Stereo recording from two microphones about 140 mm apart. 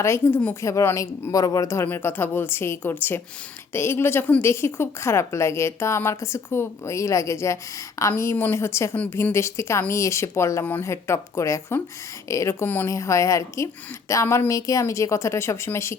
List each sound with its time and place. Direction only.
0.0 s a woman's voice: 15° left (ahead or behind)